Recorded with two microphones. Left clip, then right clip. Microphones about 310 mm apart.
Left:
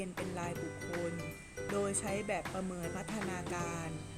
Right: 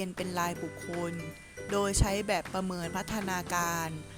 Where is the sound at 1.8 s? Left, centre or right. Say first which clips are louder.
Right 7 dB; right.